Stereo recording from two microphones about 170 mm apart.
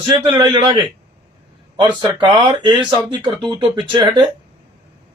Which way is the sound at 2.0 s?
25° right (ahead or behind).